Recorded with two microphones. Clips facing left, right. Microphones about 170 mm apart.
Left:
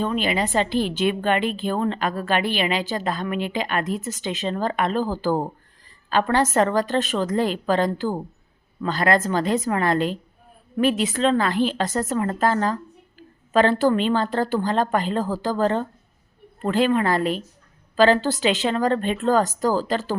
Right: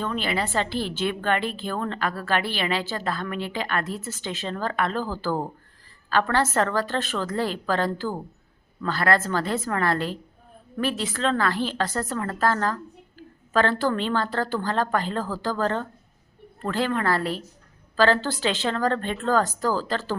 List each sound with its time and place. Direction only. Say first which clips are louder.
0.0 s a woman's voice: left 4 dB; 15° left (ahead or behind)